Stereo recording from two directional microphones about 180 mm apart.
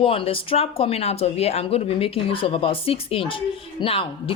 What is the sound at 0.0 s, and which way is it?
Speech, 30° left (ahead or behind).